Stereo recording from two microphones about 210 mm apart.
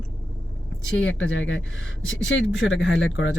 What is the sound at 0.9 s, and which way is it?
Speech, 65° left (ahead or behind).